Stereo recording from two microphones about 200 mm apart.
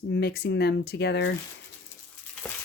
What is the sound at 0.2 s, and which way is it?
Speech, 55° left (ahead or behind).